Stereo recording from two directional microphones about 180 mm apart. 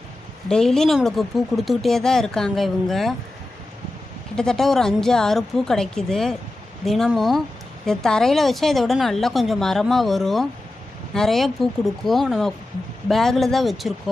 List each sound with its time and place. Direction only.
0.4 s speech: 5° left (ahead or behind)
4.4 s speech: 5° left (ahead or behind)